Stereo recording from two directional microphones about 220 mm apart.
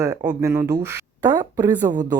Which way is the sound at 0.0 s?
15° right (ahead or behind).